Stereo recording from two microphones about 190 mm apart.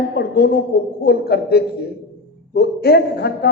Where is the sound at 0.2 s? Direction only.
55° left (ahead or behind).